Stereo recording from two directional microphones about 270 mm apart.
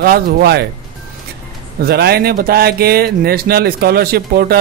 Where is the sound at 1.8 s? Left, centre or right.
Right.